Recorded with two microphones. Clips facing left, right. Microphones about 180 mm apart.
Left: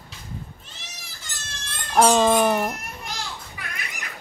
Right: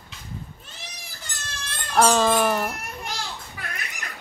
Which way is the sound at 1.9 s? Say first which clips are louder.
Left 2 dB; 15° left (ahead or behind).